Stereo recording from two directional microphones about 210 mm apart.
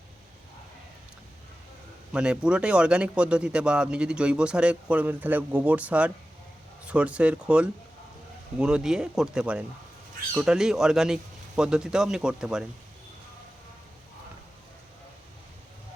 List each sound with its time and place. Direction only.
2.1 s speech: 5° right (ahead or behind)